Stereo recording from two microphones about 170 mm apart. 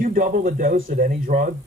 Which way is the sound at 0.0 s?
55° right (ahead or behind).